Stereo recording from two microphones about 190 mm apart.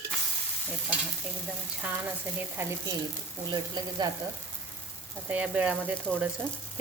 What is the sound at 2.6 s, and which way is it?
Speech, 15° right (ahead or behind).